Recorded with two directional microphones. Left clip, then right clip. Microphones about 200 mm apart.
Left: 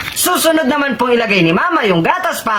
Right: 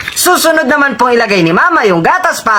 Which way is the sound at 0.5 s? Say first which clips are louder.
Right 5 dB; 30° right (ahead or behind).